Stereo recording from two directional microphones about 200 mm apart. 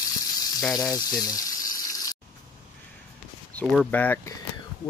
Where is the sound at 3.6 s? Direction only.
5° left (ahead or behind).